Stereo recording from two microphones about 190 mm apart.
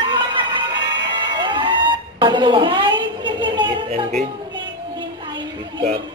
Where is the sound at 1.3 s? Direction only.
25° right (ahead or behind).